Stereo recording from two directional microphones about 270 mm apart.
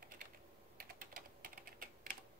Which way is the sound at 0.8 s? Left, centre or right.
Right.